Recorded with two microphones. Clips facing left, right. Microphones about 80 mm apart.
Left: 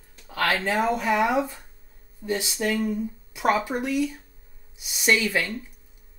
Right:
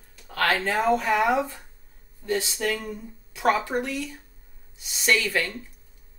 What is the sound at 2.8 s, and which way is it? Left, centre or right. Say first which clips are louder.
Speech: left 9 dB; centre.